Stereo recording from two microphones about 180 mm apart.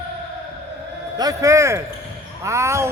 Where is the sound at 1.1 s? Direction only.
20° right (ahead or behind).